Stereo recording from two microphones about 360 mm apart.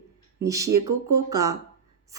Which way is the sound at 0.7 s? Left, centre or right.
Right.